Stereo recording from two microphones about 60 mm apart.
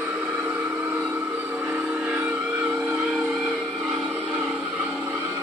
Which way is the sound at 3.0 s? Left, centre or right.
Centre.